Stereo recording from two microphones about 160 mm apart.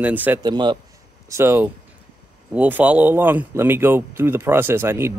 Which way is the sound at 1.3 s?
15° right (ahead or behind).